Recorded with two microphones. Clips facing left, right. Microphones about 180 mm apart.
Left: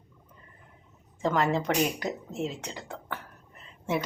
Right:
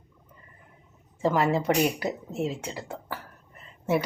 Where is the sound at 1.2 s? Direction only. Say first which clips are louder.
Right 2 dB; 5° right (ahead or behind).